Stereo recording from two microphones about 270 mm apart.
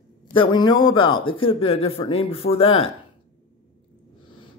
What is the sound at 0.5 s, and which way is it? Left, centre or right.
Speech, centre.